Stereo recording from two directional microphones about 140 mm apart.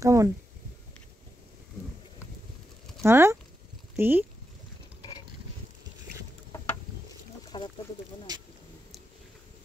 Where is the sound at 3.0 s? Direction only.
20° right (ahead or behind).